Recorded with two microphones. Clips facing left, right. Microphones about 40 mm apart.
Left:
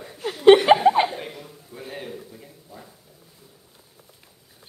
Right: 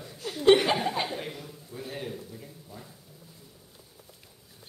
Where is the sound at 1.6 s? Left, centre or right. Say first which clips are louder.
Left 1 dB; centre.